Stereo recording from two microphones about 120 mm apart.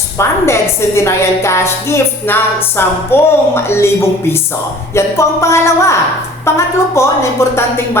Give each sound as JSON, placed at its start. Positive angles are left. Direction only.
{"t": 0.2, "sound": "a woman's voice", "side_deg": 20}
{"t": 4.9, "sound": "a woman's voice", "side_deg": 25}